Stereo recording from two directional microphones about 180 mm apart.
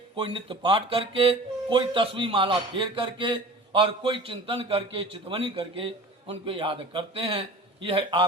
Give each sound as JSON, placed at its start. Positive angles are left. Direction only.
{"t": 0.2, "sound": "speech", "side_deg": -30}